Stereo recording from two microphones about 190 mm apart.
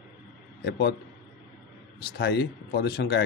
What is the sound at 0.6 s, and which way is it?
Speech, 60° left (ahead or behind).